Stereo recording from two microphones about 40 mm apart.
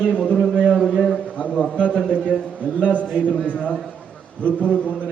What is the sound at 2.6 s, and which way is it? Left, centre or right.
A man's voice, left.